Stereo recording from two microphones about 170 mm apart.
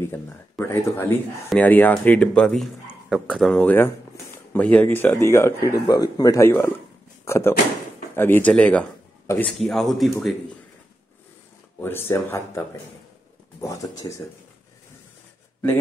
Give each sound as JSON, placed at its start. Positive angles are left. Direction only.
{"t": 0.0, "sound": "speech", "side_deg": 15}
{"t": 11.8, "sound": "speech", "side_deg": 15}